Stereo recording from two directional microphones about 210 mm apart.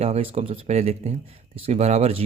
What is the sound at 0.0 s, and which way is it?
Speech, 30° right (ahead or behind).